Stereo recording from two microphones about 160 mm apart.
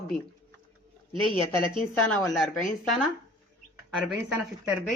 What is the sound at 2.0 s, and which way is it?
Speech, centre (ahead or behind).